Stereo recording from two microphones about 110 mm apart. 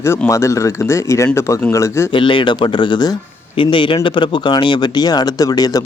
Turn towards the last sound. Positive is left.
turn(degrees=35)  # may be behind; listen again after turning